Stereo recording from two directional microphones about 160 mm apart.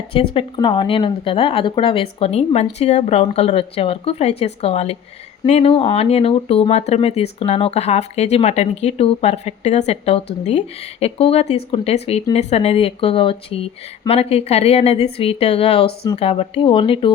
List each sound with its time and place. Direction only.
0.3 s speech: 30° left (ahead or behind)